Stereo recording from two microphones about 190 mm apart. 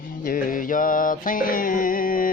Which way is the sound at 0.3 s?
45° left (ahead or behind).